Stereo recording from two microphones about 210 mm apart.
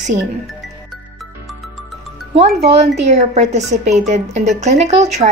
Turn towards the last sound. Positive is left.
turn(degrees=-30)  # may be behind; listen again after turning